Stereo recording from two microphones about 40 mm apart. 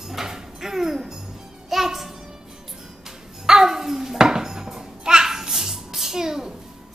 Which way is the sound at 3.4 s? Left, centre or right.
Centre.